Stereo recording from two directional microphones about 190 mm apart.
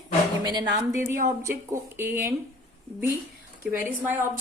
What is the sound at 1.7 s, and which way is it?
Speech, 10° right (ahead or behind).